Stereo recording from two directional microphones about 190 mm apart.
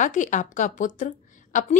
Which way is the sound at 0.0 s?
40° left (ahead or behind).